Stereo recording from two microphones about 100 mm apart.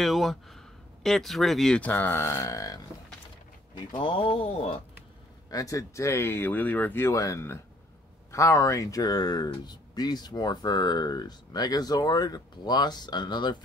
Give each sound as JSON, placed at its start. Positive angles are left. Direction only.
{"t": 0.0, "sound": "speech", "side_deg": 0}
{"t": 1.8, "sound": "speech", "side_deg": 15}
{"t": 3.7, "sound": "speech", "side_deg": 55}
{"t": 5.5, "sound": "speech", "side_deg": 35}
{"t": 7.1, "sound": "speech", "side_deg": 30}